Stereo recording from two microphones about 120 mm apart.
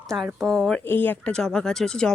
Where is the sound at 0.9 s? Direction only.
15° left (ahead or behind).